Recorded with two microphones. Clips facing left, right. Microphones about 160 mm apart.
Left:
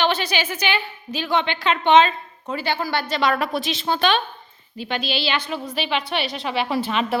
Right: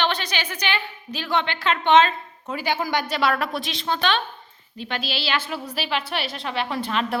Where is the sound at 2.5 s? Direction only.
15° right (ahead or behind).